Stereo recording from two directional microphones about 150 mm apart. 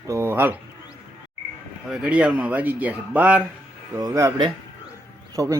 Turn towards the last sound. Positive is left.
turn(degrees=-25)  # may be behind; listen again after turning